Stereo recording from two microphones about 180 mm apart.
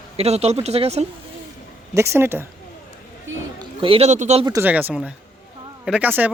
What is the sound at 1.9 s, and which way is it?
Speech, 15° right (ahead or behind).